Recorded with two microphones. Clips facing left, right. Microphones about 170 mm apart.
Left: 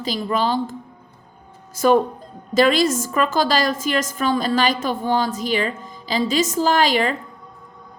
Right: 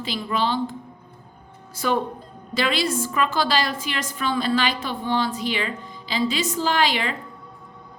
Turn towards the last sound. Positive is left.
turn(degrees=45)  # may be behind; listen again after turning